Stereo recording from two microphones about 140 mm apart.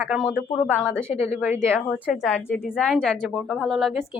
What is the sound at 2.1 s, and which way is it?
A woman's voice, 5° left (ahead or behind).